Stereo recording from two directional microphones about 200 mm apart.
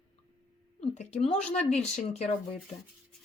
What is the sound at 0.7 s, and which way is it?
Speech, 35° left (ahead or behind).